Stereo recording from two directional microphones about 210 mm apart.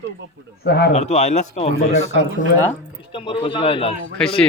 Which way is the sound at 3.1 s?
25° left (ahead or behind).